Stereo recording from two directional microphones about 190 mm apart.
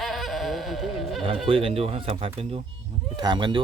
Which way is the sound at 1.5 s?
30° right (ahead or behind).